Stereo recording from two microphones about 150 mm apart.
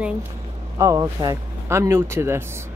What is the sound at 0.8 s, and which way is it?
A woman's voice, 25° right (ahead or behind).